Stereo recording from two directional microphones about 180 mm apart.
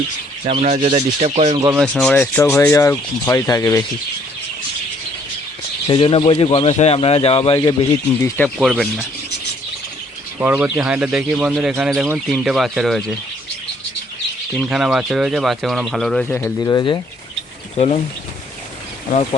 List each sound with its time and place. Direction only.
0.4 s speech: 35° right (ahead or behind)
1.8 s speech: 5° left (ahead or behind)
5.9 s a man's voice: 30° left (ahead or behind)
8.2 s speech: 5° left (ahead or behind)
10.4 s speech: 10° right (ahead or behind)
14.5 s speech: centre (ahead or behind); by 17.0 s 20° left (ahead or behind)
17.7 s a man's voice: 35° left (ahead or behind)